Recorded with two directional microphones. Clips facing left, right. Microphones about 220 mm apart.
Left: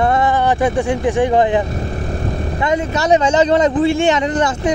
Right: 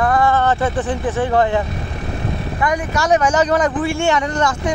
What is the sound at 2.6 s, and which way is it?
Speech, 20° left (ahead or behind).